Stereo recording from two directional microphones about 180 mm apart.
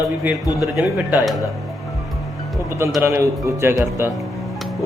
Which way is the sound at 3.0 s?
15° right (ahead or behind).